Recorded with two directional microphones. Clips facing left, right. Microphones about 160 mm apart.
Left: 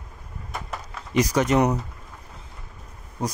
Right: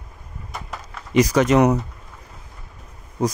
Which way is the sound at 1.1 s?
90° right.